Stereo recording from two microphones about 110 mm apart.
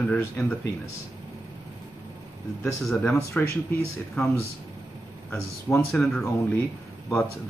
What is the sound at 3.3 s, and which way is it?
Speech, 20° left (ahead or behind).